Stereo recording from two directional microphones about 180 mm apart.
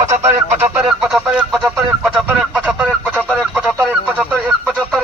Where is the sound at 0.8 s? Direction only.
5° right (ahead or behind).